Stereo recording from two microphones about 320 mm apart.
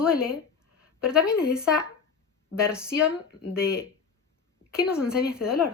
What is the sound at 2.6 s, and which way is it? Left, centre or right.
Speech, centre.